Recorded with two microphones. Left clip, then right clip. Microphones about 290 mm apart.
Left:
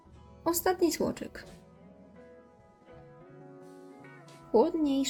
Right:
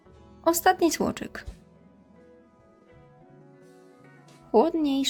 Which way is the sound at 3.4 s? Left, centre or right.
Centre.